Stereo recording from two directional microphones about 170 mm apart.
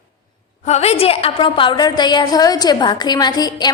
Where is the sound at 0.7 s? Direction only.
40° left (ahead or behind).